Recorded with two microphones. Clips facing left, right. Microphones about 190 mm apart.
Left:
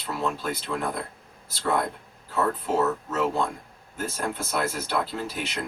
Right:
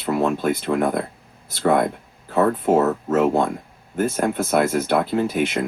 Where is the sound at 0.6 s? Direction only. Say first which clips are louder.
Right 9 dB; 60° right (ahead or behind).